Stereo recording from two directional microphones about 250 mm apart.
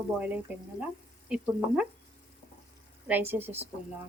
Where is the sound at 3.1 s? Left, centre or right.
Centre.